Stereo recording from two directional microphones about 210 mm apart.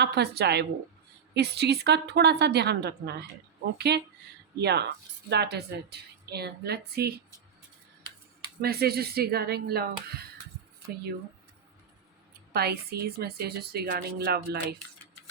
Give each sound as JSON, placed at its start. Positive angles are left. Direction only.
{"t": 0.0, "sound": "speech", "side_deg": -50}
{"t": 8.6, "sound": "speech", "side_deg": -50}
{"t": 12.5, "sound": "speech", "side_deg": -50}